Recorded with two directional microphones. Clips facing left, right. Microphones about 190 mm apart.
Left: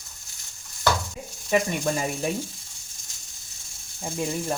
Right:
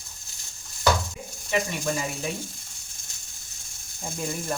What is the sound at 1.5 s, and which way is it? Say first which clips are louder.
Speech: left 3 dB; 45° left (ahead or behind).